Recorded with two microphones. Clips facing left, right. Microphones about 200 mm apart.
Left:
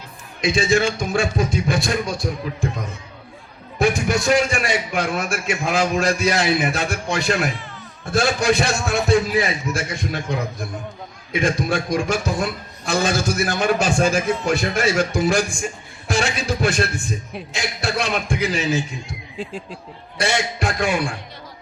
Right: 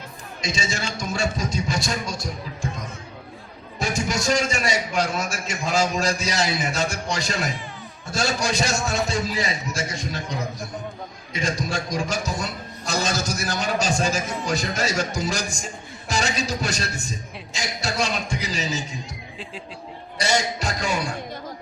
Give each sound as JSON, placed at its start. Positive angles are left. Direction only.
{"t": 0.4, "sound": "a man's voice", "side_deg": 55}
{"t": 16.6, "sound": "a man's voice", "side_deg": 60}
{"t": 20.6, "sound": "a man's voice", "side_deg": 60}